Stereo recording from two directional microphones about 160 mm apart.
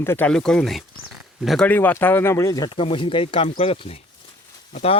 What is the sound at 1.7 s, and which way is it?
Speech, 10° left (ahead or behind).